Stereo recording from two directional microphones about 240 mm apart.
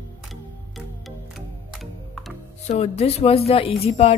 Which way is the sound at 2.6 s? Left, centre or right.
Left.